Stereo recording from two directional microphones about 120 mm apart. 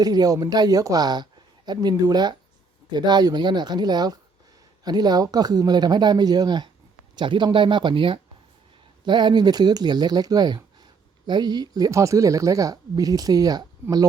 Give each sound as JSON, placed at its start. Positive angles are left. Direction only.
{"t": 0.0, "sound": "speech", "side_deg": -30}